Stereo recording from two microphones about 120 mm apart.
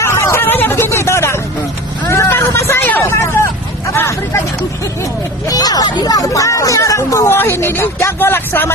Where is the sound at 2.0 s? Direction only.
25° left (ahead or behind).